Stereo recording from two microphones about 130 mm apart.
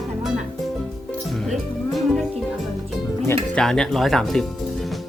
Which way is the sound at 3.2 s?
5° left (ahead or behind).